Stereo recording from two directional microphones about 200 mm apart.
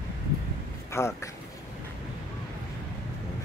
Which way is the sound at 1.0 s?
15° left (ahead or behind).